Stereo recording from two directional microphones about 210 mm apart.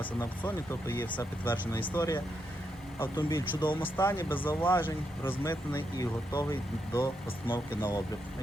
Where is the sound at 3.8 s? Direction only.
10° left (ahead or behind).